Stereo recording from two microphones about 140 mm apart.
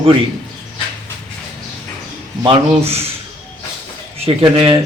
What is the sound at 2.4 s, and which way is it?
Speech, 40° right (ahead or behind).